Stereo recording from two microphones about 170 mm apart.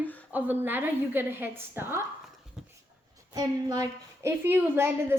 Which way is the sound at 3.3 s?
20° right (ahead or behind).